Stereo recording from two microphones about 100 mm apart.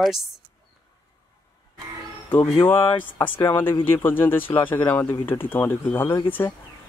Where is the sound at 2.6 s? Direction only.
20° left (ahead or behind).